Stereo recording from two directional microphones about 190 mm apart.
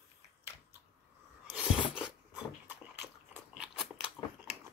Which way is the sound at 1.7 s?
25° left (ahead or behind).